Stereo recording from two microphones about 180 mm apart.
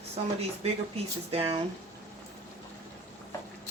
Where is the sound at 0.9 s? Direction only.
35° right (ahead or behind).